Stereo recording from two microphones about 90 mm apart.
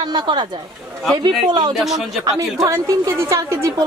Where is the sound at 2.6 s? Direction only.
30° right (ahead or behind).